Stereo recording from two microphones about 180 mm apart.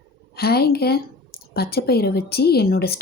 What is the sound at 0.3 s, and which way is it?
A woman's voice, 60° left (ahead or behind).